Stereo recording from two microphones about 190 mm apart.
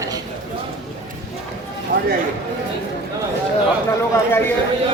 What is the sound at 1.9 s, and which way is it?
Speech, 45° right (ahead or behind).